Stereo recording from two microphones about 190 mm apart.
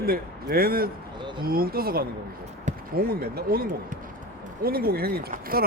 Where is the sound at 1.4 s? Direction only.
50° right (ahead or behind).